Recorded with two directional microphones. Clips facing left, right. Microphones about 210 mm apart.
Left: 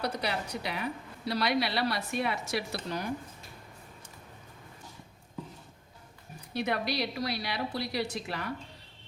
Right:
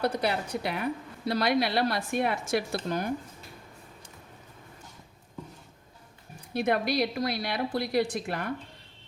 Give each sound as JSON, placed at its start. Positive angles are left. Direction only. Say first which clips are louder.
{"t": 0.0, "sound": "a woman's voice", "louder": "right 5 dB", "side_deg": -50}
{"t": 6.5, "sound": "a woman's voice", "louder": "right 5 dB", "side_deg": -50}